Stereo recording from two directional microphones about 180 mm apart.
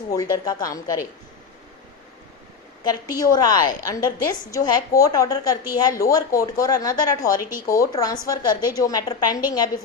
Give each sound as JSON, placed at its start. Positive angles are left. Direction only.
{"t": 0.1, "sound": "a woman's voice", "side_deg": 20}
{"t": 2.8, "sound": "a woman's voice", "side_deg": 20}